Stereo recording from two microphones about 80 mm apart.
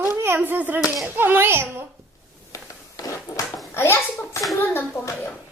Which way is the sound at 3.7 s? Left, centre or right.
Left.